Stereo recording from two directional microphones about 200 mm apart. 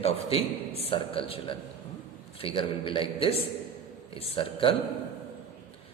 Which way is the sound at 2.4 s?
25° left (ahead or behind).